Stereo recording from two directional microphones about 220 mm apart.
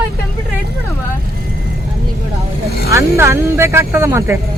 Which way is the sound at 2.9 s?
15° right (ahead or behind).